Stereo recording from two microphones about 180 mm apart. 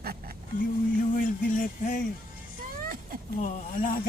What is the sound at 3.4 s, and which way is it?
Speech, 45° left (ahead or behind).